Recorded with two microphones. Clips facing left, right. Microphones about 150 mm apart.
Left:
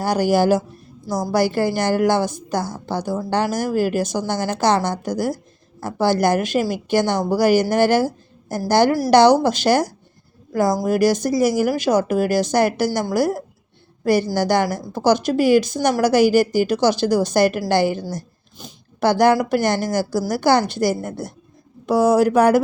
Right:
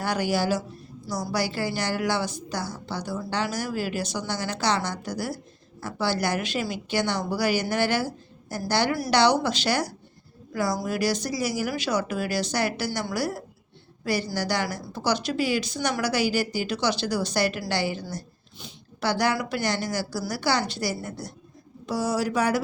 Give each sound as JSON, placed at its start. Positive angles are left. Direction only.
{"t": 0.0, "sound": "a woman's voice", "side_deg": 40}